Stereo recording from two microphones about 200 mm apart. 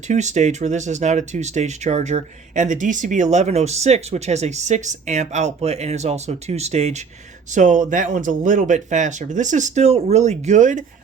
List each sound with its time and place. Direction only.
0.1 s speech: 35° right (ahead or behind)